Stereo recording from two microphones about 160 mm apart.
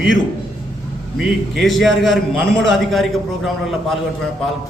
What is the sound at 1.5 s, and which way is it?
A man's voice, centre (ahead or behind).